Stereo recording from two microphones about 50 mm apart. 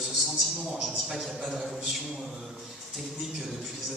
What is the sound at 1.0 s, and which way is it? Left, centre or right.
Speech, centre.